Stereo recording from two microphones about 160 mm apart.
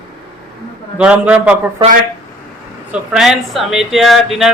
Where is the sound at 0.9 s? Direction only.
5° right (ahead or behind).